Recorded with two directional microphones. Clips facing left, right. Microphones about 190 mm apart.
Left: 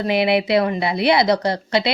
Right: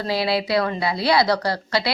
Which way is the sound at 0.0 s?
20° left (ahead or behind).